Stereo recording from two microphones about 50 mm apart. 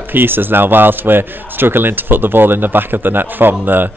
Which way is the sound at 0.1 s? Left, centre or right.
Right.